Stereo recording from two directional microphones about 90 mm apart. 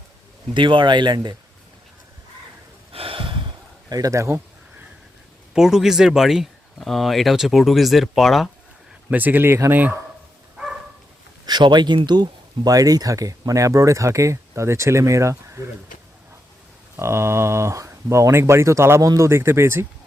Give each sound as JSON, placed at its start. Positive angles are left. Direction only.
{"t": 0.5, "sound": "speech", "side_deg": -65}
{"t": 2.9, "sound": "a sound", "side_deg": -85}
{"t": 3.8, "sound": "speech", "side_deg": -45}
{"t": 5.5, "sound": "speech", "side_deg": -5}
{"t": 9.0, "sound": "speech", "side_deg": -20}
{"t": 11.4, "sound": "speech", "side_deg": -55}
{"t": 12.7, "sound": "speech", "side_deg": -45}
{"t": 17.0, "sound": "speech", "side_deg": -30}